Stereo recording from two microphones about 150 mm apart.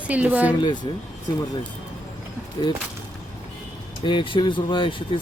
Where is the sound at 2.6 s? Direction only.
30° left (ahead or behind).